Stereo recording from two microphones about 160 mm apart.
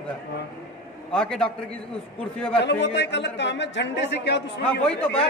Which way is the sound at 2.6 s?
90° left.